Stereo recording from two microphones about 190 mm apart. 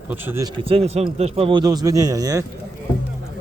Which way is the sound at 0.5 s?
30° right (ahead or behind).